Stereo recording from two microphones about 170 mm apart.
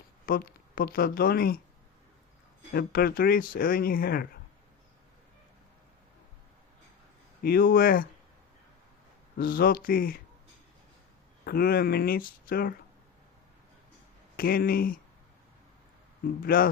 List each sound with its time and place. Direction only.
0.3 s speech: 60° left (ahead or behind)
2.7 s speech: 60° left (ahead or behind)
7.4 s speech: 60° left (ahead or behind)
9.4 s speech: 60° left (ahead or behind)
11.4 s speech: 60° left (ahead or behind)
14.3 s speech: 60° left (ahead or behind)
16.2 s speech: 60° left (ahead or behind)